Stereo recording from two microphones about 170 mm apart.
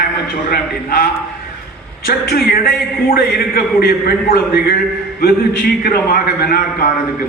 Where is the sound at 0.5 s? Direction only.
60° left (ahead or behind).